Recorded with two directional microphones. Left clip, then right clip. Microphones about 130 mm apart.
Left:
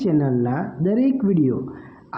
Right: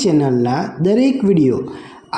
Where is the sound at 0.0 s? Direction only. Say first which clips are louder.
Right 6 dB; 25° right (ahead or behind).